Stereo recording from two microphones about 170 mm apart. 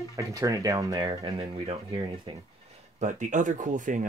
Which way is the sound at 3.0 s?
45° right (ahead or behind).